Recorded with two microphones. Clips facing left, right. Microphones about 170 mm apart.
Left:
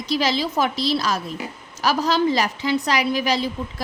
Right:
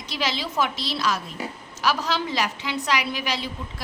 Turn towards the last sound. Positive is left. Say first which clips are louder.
# left 7 dB
turn(degrees=40)  # may be behind; listen again after turning